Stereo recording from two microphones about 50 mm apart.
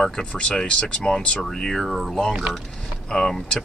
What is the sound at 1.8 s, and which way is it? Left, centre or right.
Speech, centre.